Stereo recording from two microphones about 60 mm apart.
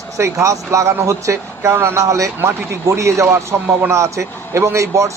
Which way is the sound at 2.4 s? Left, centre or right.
Right.